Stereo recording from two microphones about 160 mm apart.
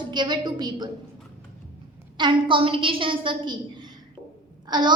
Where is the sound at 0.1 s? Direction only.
30° right (ahead or behind).